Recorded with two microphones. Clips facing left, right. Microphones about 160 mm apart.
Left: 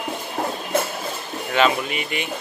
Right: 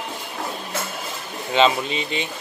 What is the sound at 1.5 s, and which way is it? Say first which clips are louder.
Speech: right 1 dB; 25° right (ahead or behind).